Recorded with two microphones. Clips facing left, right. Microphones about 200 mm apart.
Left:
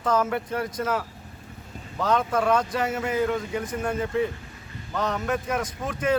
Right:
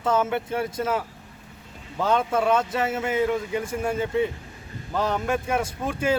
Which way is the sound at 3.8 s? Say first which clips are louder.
Right 1 dB; 10° right (ahead or behind).